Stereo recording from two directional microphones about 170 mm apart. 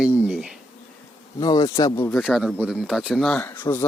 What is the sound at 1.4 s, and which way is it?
Bee, 20° left (ahead or behind).